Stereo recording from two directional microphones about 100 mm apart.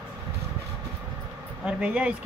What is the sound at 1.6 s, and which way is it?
Speech, 10° right (ahead or behind).